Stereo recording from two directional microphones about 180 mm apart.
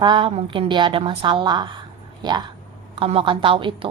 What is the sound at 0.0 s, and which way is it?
A woman's voice, 25° right (ahead or behind).